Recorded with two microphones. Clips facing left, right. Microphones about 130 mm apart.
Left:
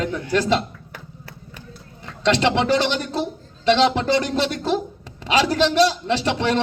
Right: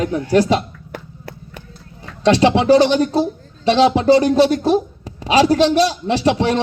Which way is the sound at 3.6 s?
15° right (ahead or behind).